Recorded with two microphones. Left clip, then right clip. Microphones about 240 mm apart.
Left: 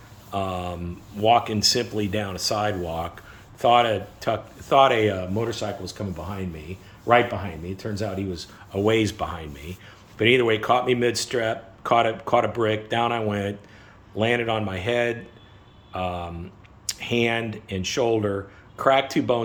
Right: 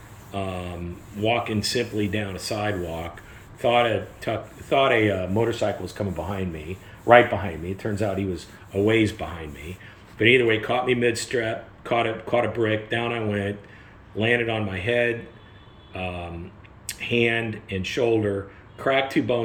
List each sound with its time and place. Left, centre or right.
0.3 s speech: centre
8.7 s speech: centre